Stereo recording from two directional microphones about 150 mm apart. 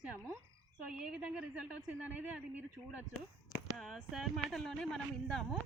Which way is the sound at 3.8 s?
Centre (ahead or behind).